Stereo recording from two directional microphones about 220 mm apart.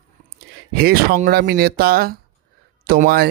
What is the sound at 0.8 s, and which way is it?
Speech, 40° right (ahead or behind).